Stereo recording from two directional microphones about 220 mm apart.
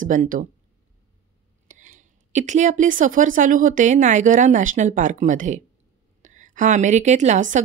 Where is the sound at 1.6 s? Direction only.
35° right (ahead or behind).